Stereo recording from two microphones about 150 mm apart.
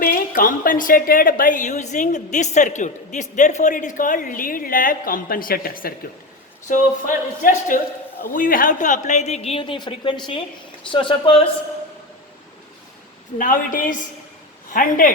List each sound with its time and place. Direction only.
0.0 s a woman's voice: 75° left (ahead or behind)
6.7 s a woman's voice: 60° left (ahead or behind); by 11.3 s 35° left (ahead or behind)
13.4 s a woman's voice: 65° left (ahead or behind)